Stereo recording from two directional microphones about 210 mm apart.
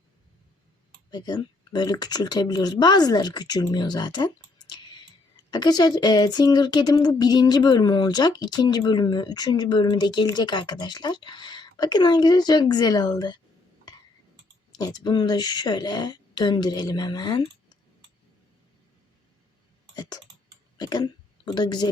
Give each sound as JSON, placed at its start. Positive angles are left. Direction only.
{"t": 1.1, "sound": "speech", "side_deg": 20}
{"t": 14.7, "sound": "speech", "side_deg": 20}
{"t": 20.7, "sound": "speech", "side_deg": 20}